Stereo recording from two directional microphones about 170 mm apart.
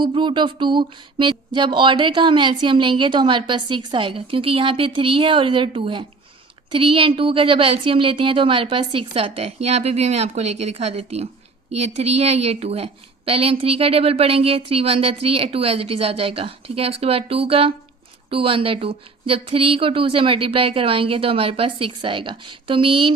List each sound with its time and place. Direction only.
0.0 s a woman's voice: 30° right (ahead or behind)